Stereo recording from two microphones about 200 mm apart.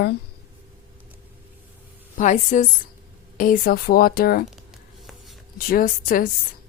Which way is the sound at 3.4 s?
45° left (ahead or behind).